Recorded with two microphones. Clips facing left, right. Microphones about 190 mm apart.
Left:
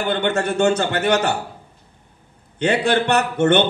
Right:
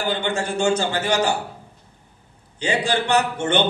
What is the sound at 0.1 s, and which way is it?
A man's voice, 60° left (ahead or behind).